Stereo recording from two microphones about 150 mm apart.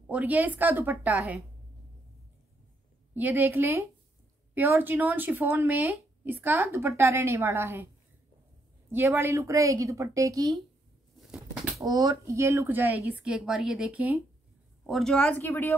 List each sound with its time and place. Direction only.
0.0 s speech: 10° right (ahead or behind)
3.2 s speech: 10° right (ahead or behind)
8.9 s a woman's voice: 15° right (ahead or behind)
11.8 s speech: 25° right (ahead or behind); by 14.2 s 10° right (ahead or behind)
14.9 s speech: centre (ahead or behind)